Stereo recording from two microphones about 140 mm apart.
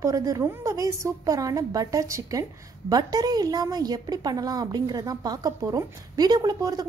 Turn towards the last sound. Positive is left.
turn(degrees=-25)  # may be behind; listen again after turning